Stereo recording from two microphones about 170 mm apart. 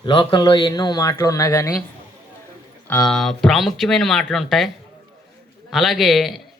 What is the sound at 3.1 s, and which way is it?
Speech, 5° left (ahead or behind).